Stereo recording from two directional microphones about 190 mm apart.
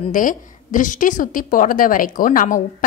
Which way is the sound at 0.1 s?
45° left (ahead or behind).